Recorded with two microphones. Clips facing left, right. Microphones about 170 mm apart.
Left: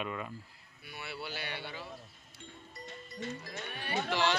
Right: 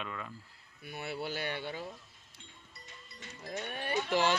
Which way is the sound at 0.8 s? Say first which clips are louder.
Right 5 dB; 50° right (ahead or behind).